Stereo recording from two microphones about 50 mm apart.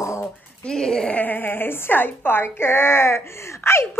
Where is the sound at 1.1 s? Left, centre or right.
Left.